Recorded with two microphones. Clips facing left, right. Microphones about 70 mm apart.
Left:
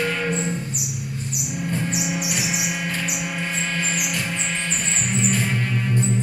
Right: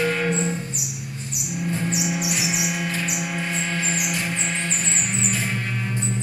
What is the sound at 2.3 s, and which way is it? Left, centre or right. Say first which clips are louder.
Music: even; left.